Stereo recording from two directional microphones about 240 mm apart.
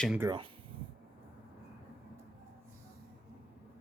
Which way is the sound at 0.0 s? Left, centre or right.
Centre.